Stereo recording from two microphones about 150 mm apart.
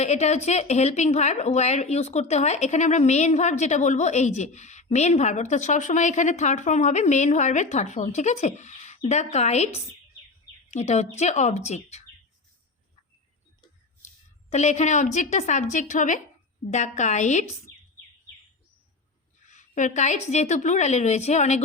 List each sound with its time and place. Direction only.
0.0 s speech: 45° left (ahead or behind)
14.5 s speech: 50° left (ahead or behind)
19.5 s speech: 55° left (ahead or behind)